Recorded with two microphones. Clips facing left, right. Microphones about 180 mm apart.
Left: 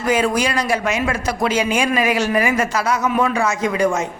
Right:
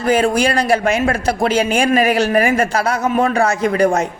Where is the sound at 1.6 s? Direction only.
50° right (ahead or behind).